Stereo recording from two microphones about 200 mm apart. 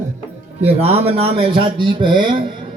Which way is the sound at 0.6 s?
30° right (ahead or behind).